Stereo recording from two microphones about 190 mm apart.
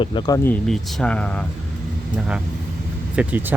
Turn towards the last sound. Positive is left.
turn(degrees=-10)  # may be behind; listen again after turning